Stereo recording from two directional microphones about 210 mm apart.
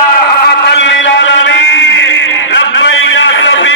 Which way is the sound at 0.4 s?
55° left (ahead or behind).